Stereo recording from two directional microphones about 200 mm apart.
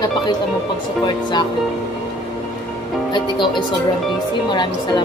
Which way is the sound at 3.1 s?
25° left (ahead or behind).